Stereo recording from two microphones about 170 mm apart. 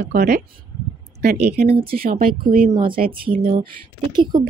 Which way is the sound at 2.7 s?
30° right (ahead or behind).